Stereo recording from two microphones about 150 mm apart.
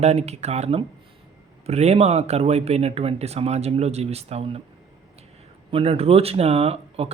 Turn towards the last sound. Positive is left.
turn(degrees=-45)  # may be behind; listen again after turning